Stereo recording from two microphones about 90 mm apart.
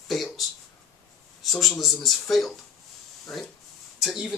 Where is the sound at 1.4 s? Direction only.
Centre (ahead or behind).